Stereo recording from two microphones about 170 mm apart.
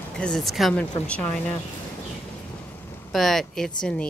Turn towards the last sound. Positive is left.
turn(degrees=5)  # may be behind; listen again after turning